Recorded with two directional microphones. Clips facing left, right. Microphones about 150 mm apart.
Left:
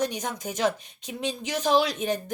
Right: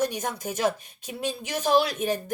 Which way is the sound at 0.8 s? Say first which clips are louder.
Even; 50° right (ahead or behind).